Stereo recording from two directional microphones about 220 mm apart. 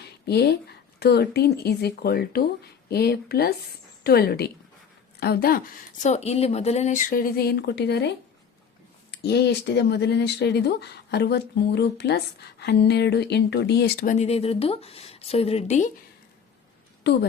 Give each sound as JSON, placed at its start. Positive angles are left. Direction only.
{"t": 0.0, "sound": "a woman's voice", "side_deg": 50}
{"t": 9.1, "sound": "speech", "side_deg": 50}
{"t": 17.0, "sound": "a woman's voice", "side_deg": 50}